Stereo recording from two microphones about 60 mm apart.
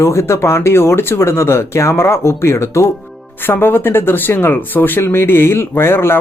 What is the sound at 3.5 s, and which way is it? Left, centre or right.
Speech, left.